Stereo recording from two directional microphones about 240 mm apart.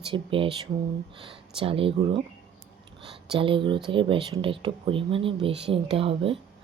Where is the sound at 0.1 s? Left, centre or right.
Right.